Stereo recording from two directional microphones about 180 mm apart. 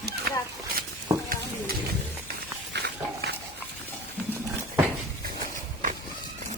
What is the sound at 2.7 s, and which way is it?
Dog, 65° right (ahead or behind).